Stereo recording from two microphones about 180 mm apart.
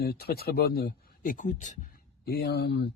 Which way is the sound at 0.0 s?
60° left (ahead or behind).